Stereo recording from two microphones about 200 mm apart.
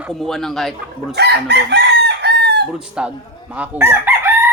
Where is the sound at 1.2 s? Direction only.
55° right (ahead or behind).